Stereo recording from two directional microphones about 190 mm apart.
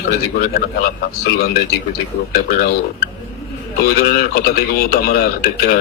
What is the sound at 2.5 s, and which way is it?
Speech, 50° left (ahead or behind).